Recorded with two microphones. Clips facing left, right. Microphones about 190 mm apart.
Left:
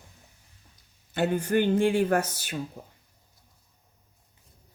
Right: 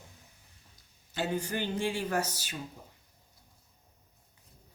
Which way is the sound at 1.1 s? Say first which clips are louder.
Left 8 dB; 55° left (ahead or behind).